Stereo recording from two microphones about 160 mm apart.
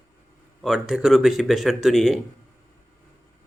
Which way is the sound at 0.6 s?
Centre (ahead or behind).